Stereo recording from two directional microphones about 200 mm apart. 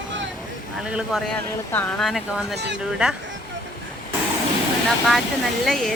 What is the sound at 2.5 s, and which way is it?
Speech, 60° right (ahead or behind).